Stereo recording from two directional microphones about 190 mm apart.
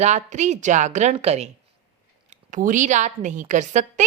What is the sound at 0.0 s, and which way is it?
A woman's voice, 40° right (ahead or behind).